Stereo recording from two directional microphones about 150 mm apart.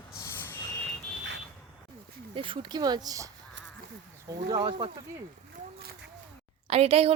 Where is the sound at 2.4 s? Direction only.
30° right (ahead or behind).